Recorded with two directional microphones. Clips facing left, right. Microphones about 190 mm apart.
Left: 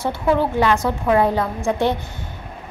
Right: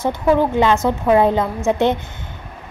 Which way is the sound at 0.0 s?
20° right (ahead or behind).